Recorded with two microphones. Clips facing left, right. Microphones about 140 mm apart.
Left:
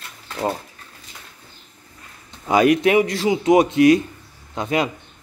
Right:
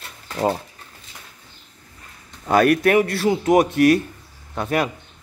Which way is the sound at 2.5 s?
10° left (ahead or behind).